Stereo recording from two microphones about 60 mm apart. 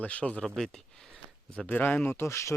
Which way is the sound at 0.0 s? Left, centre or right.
Left.